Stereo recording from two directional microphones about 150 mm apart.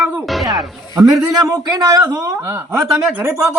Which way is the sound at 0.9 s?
20° right (ahead or behind).